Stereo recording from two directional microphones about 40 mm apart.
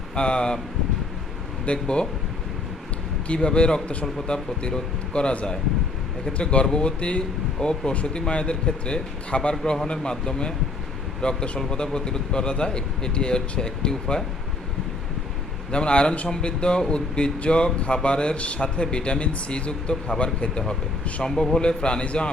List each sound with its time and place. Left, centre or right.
0.2 s speech: left
1.6 s speech: left
3.2 s speech: left
15.7 s speech: left
21.2 s a man's voice: centre
21.6 s speech: left